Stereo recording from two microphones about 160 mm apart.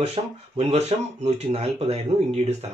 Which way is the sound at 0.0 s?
40° right (ahead or behind).